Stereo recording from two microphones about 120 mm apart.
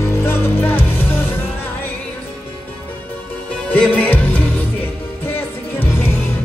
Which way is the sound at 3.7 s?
10° left (ahead or behind).